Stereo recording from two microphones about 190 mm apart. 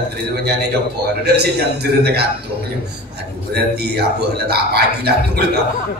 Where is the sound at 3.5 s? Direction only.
60° right (ahead or behind).